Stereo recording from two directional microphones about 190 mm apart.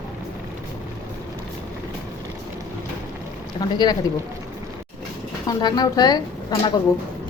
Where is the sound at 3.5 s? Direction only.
20° left (ahead or behind).